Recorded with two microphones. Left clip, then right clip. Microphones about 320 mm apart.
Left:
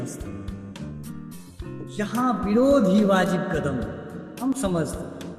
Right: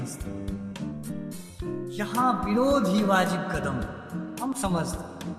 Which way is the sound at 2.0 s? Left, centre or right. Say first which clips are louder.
Even; centre.